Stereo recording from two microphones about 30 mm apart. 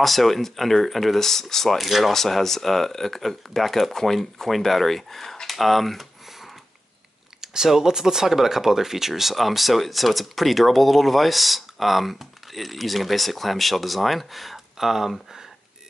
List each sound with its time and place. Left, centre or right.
0.0 s speech: centre
1.7 s speech: centre
2.1 s speech: centre
7.4 s speech: centre